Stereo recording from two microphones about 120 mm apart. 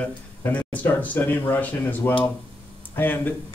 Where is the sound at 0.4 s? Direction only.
15° left (ahead or behind).